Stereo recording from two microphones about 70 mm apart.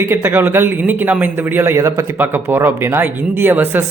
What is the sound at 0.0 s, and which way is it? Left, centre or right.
A man's voice, right.